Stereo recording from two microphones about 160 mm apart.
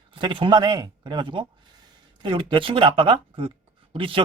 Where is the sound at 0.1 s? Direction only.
30° right (ahead or behind).